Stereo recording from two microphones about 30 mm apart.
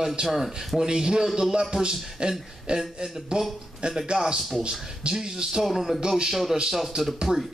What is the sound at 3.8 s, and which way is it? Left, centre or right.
Speech, right.